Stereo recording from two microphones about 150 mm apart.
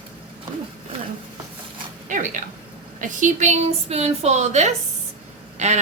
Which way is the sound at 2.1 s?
55° right (ahead or behind).